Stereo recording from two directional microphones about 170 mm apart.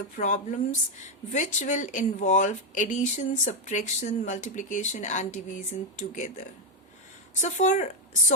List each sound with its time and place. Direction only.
0.2 s speech: 45° left (ahead or behind)